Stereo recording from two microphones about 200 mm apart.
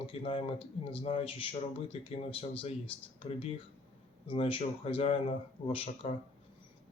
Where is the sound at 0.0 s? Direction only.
25° left (ahead or behind).